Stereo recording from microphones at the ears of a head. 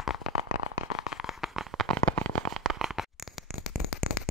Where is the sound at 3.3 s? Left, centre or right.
Left.